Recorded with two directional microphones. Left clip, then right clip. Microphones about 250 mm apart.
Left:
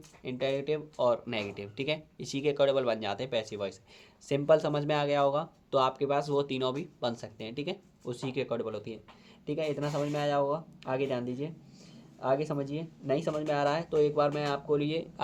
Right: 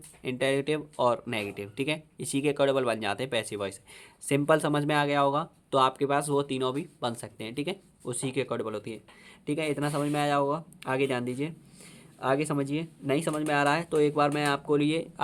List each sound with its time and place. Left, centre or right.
0.2 s speech: right